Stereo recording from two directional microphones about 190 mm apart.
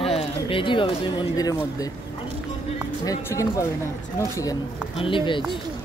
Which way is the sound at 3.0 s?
15° left (ahead or behind).